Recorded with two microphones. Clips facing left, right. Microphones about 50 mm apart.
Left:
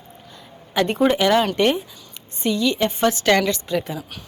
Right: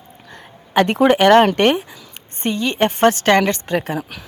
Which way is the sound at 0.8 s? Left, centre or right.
Right.